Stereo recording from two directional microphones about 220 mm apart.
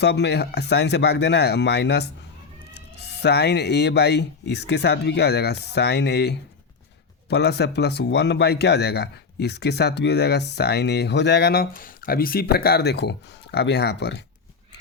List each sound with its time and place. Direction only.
0.0 s speech: 50° left (ahead or behind)